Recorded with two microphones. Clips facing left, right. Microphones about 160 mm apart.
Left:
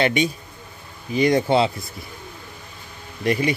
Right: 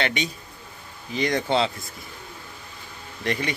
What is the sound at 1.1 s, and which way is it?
Speech, 10° left (ahead or behind).